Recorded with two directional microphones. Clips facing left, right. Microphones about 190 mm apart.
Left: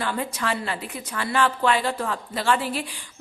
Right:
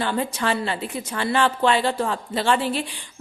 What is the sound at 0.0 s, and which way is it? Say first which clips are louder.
A woman's voice: right 3 dB; 30° right (ahead or behind).